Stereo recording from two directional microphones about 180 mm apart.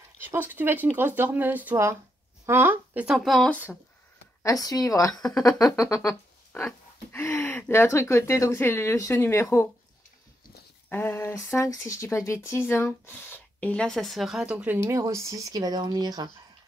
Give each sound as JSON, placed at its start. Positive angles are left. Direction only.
{"t": 0.2, "sound": "speech", "side_deg": -10}
{"t": 4.4, "sound": "a woman's voice", "side_deg": 20}
{"t": 10.9, "sound": "speech", "side_deg": 10}